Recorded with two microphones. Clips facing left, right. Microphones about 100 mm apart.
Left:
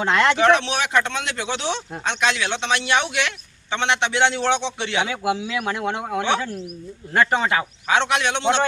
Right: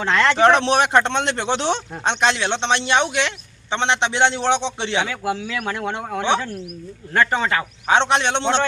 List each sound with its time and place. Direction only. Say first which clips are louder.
0.0 s speech: even; 15° left (ahead or behind)
0.6 s a man's voice: right 5 dB; 35° right (ahead or behind)
4.9 s speech: left 2 dB; 15° left (ahead or behind)
7.9 s a man's voice: right 3 dB; 30° right (ahead or behind)